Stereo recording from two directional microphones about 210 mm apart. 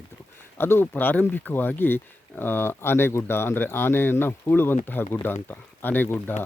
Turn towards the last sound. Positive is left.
turn(degrees=10)  # may be behind; listen again after turning